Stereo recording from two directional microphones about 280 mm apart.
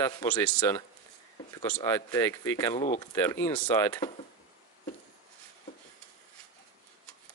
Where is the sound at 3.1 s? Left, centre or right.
Centre.